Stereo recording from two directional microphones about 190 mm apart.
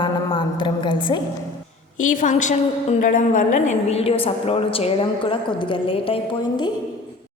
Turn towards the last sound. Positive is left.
turn(degrees=25)  # may be behind; listen again after turning